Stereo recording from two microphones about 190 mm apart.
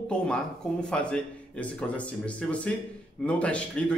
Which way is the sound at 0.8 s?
5° left (ahead or behind).